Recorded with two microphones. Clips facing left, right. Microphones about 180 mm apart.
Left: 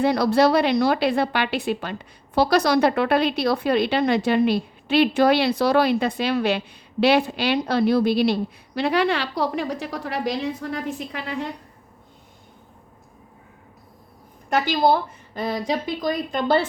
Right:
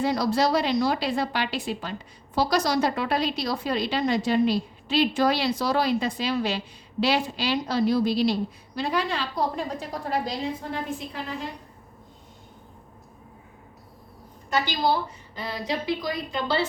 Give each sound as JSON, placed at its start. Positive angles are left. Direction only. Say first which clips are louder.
{"t": 0.0, "sound": "a woman's voice", "louder": "left 5 dB", "side_deg": 65}
{"t": 14.5, "sound": "a woman's voice", "louder": "left 5 dB", "side_deg": 55}